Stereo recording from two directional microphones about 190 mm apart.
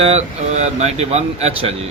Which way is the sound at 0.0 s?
35° right (ahead or behind).